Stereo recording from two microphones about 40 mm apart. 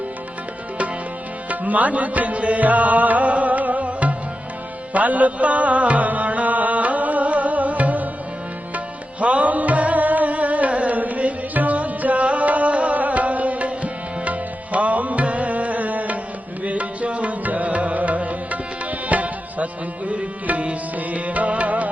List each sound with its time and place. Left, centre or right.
1.5 s music: right
9.2 s music: right